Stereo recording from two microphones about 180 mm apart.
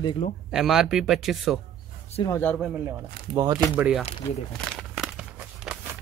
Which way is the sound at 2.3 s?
10° left (ahead or behind).